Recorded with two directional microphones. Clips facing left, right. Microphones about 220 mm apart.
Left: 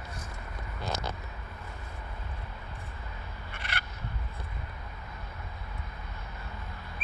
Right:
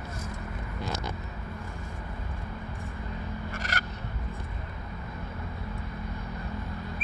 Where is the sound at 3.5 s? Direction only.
45° right (ahead or behind).